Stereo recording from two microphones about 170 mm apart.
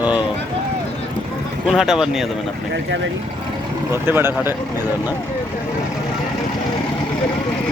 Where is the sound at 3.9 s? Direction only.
15° right (ahead or behind).